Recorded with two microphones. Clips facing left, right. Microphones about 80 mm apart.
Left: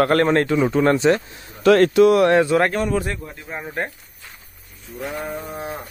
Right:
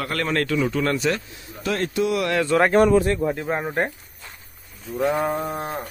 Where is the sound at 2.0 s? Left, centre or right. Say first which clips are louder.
Left 6 dB; left.